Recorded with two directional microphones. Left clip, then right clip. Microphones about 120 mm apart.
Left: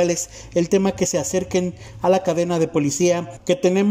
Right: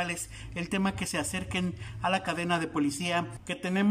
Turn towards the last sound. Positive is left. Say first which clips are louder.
# left 13 dB
turn(degrees=20)  # may be behind; listen again after turning